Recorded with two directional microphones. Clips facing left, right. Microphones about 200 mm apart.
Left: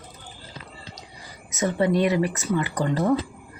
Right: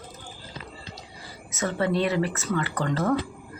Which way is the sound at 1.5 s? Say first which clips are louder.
Left 3 dB; 15° left (ahead or behind).